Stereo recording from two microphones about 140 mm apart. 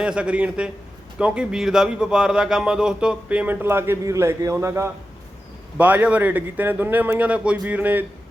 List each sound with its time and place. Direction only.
0.0 s speech: 5° right (ahead or behind)